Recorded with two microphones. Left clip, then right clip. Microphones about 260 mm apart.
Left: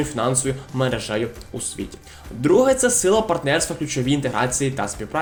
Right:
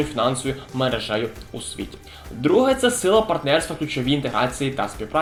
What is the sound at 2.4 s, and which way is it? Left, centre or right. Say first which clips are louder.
Speech: left 1 dB; left.